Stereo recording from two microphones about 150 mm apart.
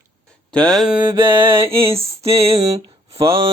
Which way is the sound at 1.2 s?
15° right (ahead or behind).